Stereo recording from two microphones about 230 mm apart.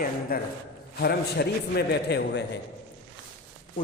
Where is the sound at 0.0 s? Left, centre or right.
Left.